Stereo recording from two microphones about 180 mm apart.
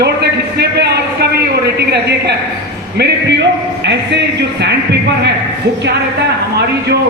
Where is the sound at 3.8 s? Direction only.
85° right.